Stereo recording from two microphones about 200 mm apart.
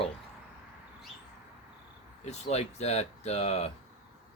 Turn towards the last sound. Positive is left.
turn(degrees=30)  # may be behind; listen again after turning